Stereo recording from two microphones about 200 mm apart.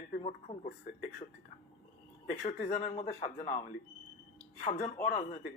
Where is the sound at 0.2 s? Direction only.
30° left (ahead or behind).